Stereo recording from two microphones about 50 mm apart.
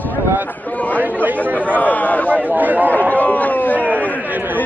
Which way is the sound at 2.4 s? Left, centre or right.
Right.